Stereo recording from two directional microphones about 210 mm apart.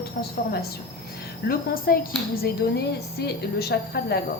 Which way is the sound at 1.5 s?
45° left (ahead or behind).